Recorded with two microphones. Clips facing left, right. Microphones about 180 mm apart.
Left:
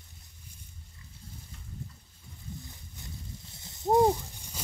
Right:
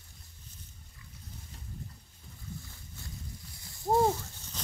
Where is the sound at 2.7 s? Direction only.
20° left (ahead or behind).